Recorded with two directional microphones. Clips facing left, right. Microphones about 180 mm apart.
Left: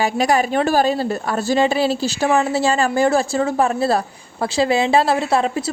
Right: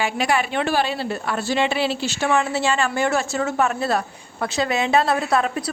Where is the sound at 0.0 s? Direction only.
40° left (ahead or behind).